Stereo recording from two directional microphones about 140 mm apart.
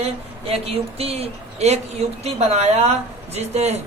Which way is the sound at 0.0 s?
45° right (ahead or behind).